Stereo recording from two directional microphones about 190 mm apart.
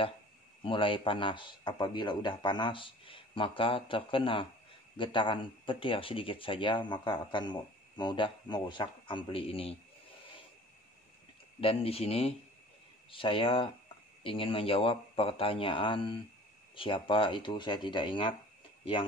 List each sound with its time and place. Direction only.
0.7 s speech: 25° left (ahead or behind)
11.6 s speech: 30° left (ahead or behind)